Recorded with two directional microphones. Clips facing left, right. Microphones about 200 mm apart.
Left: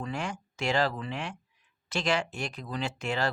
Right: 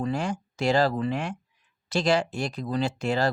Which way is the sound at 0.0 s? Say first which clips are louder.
Right 7 dB; 35° right (ahead or behind).